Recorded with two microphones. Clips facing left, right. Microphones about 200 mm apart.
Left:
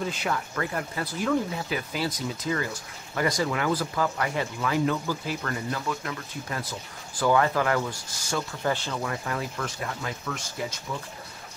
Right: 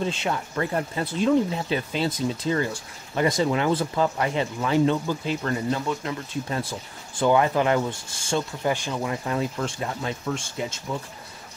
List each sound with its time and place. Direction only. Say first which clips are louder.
0.0 s speech: right 3 dB; 25° right (ahead or behind)
8.6 s speech: right 3 dB; 15° right (ahead or behind)